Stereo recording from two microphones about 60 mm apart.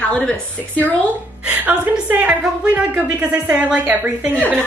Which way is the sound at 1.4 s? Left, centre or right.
Right.